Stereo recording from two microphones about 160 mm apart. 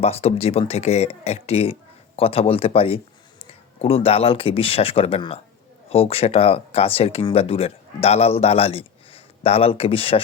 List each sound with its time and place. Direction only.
0.0 s speech: 40° left (ahead or behind)